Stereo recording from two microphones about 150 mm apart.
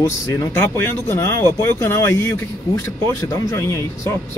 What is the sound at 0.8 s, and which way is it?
Speech, 15° left (ahead or behind).